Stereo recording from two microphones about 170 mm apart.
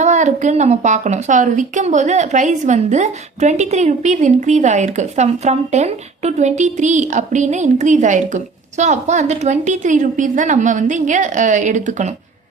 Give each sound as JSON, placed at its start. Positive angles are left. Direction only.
{"t": 0.0, "sound": "a woman's voice", "side_deg": -45}